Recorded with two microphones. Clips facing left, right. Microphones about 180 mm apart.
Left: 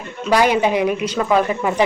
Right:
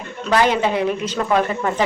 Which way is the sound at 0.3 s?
10° left (ahead or behind).